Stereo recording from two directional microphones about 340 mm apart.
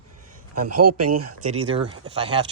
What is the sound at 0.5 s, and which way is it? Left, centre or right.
Speech, right.